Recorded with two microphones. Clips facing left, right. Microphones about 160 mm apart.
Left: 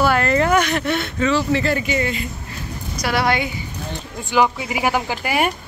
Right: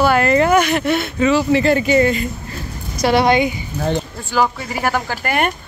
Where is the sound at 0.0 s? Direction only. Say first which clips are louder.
Right 3 dB; centre (ahead or behind).